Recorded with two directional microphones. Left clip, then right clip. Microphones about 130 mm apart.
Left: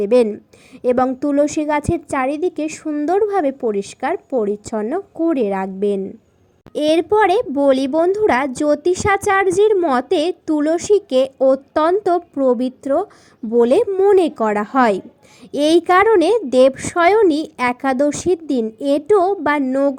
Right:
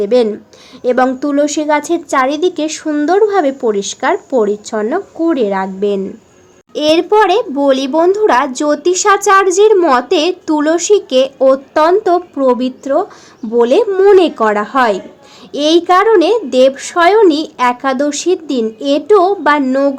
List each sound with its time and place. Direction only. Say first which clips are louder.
0.0 s a woman's voice: right 3 dB; 45° left (ahead or behind)
2.8 s speech: right 7 dB; 15° left (ahead or behind)
3.1 s a woman's voice: right 6 dB; 35° left (ahead or behind)
4.6 s a woman's voice: right 6 dB; 40° left (ahead or behind)
13.9 s speech: right 6 dB; 20° left (ahead or behind)
14.2 s a woman's voice: right 6 dB; 40° left (ahead or behind)